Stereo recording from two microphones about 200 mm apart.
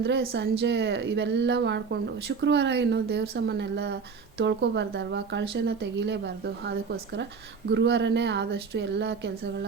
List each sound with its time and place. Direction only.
0.0 s speech: 55° right (ahead or behind)